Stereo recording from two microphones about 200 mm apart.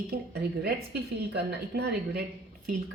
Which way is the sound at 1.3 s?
55° right (ahead or behind).